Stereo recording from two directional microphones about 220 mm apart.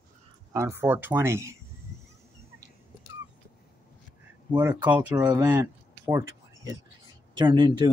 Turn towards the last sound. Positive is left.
turn(degrees=-20)  # may be behind; listen again after turning